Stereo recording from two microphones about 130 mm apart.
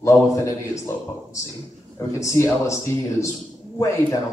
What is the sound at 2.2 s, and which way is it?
Speech, 25° left (ahead or behind).